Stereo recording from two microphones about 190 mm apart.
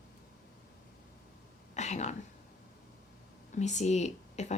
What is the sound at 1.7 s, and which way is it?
Speech, 35° left (ahead or behind).